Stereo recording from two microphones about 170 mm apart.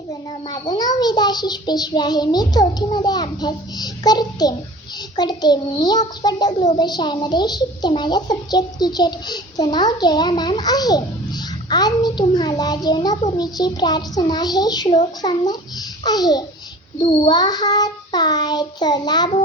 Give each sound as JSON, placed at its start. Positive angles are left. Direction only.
{"t": 0.1, "sound": "a child's voice", "side_deg": 25}